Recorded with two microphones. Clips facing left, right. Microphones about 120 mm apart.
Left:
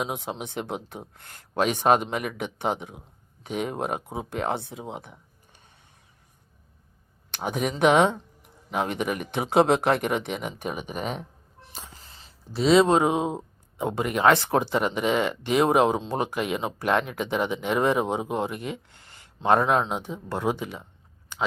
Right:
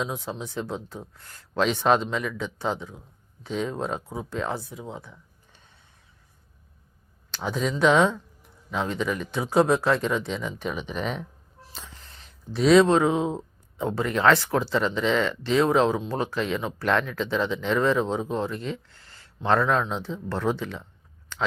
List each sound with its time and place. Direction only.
0.2 s speech: 65° left (ahead or behind); by 2.0 s 45° left (ahead or behind)
2.0 s speech: 60° left (ahead or behind)
4.0 s speech: 20° left (ahead or behind)
4.3 s speech: 60° left (ahead or behind)
7.3 s speech: 55° left (ahead or behind)
7.9 s speech: 15° left (ahead or behind)
8.1 s speech: 55° left (ahead or behind)
11.7 s a sound: 45° left (ahead or behind)
12.0 s a sound: centre (ahead or behind)
12.8 s speech: 15° left (ahead or behind)
21.3 s a sound: 10° left (ahead or behind)